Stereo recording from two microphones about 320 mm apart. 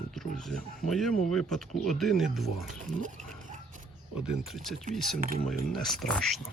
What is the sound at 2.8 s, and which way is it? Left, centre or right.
Speech, right.